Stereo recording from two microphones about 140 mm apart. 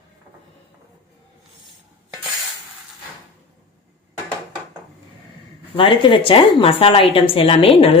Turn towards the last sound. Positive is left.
turn(degrees=40)  # may be behind; listen again after turning